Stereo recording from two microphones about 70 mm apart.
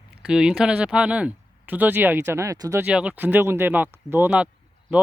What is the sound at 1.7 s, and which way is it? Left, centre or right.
Speech, right.